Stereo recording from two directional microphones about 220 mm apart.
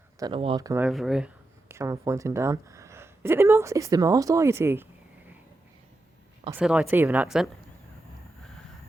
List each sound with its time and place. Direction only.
0.2 s speech: 20° right (ahead or behind)
0.7 s speech: 5° right (ahead or behind)
6.5 s a woman's voice: 5° right (ahead or behind)